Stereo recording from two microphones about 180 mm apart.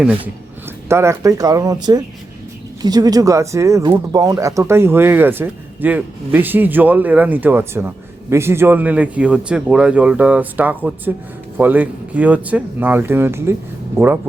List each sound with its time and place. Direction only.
0.9 s speech: 15° right (ahead or behind)